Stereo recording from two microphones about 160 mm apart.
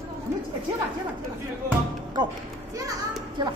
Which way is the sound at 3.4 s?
30° right (ahead or behind).